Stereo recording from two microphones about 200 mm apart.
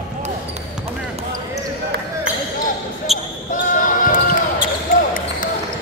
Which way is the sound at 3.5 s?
40° left (ahead or behind).